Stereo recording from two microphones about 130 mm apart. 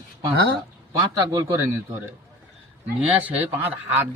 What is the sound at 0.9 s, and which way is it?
Speech, 25° right (ahead or behind).